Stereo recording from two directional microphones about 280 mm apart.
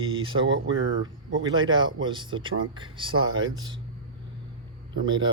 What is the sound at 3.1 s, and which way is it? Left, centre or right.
Speech, right.